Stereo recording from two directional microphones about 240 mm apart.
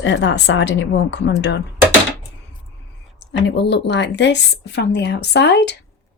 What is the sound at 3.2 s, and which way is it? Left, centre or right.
Speech, left.